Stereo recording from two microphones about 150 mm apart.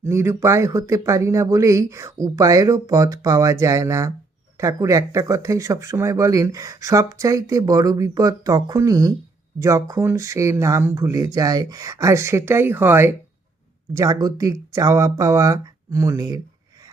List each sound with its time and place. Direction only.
0.0 s speech: 20° right (ahead or behind)